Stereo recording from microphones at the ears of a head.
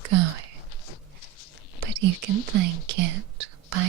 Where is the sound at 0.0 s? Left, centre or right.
Right.